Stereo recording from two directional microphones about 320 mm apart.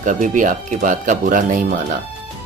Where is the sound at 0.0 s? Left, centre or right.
Right.